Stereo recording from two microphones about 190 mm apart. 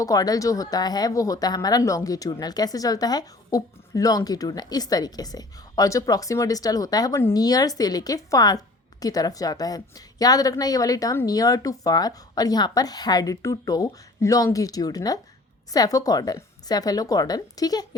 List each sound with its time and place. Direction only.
0.0 s speech: 20° left (ahead or behind)